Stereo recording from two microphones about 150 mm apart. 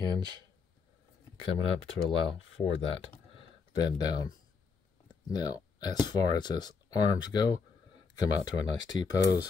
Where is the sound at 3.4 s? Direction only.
30° left (ahead or behind).